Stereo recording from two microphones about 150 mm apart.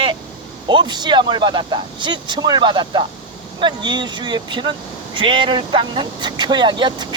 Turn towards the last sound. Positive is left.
turn(degrees=-30)  # may be behind; listen again after turning